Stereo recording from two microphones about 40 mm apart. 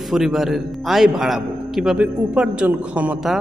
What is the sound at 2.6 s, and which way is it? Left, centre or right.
Speech, right.